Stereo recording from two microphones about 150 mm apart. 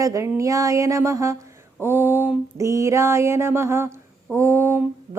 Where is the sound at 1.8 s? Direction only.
15° right (ahead or behind).